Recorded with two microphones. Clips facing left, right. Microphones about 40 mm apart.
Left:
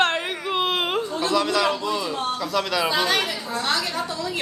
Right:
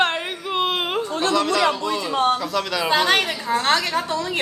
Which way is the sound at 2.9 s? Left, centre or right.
Right.